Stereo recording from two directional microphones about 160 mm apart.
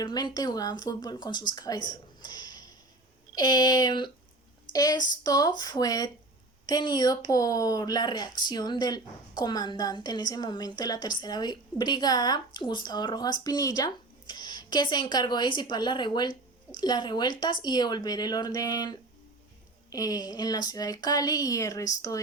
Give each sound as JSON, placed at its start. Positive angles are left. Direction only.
{"t": 0.0, "sound": "speech", "side_deg": 25}
{"t": 1.9, "sound": "a sound", "side_deg": 25}
{"t": 3.3, "sound": "speech", "side_deg": 25}